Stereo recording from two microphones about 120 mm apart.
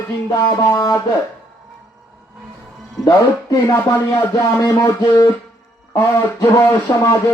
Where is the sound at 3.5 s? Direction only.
20° left (ahead or behind).